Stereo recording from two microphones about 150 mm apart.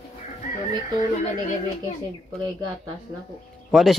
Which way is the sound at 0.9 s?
55° left (ahead or behind).